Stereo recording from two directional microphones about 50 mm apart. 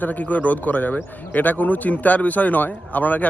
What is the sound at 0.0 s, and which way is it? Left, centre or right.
A man's voice, left.